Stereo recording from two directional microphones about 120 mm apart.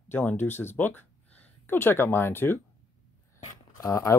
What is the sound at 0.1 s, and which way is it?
Speech, 15° left (ahead or behind).